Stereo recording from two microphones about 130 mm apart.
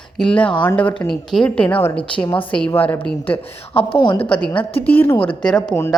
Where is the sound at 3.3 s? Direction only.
45° left (ahead or behind).